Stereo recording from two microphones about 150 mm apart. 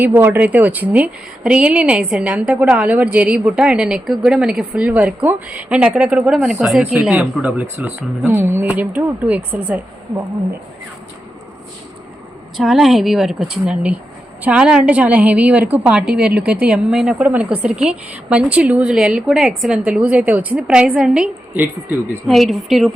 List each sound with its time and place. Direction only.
0.0 s a woman's voice: 15° right (ahead or behind)
12.5 s a woman's voice: centre (ahead or behind)